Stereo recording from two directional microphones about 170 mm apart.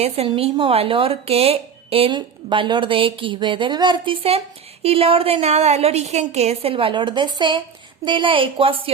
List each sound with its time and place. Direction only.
0.0 s speech: 35° right (ahead or behind)